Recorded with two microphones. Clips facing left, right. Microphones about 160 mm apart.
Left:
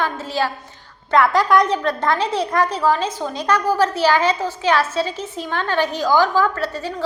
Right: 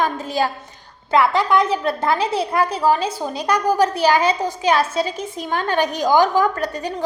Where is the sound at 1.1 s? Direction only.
5° right (ahead or behind).